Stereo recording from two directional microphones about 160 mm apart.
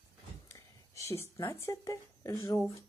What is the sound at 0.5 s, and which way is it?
Speech, 20° left (ahead or behind).